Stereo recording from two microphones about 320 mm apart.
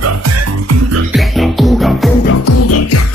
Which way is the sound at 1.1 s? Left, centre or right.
Centre.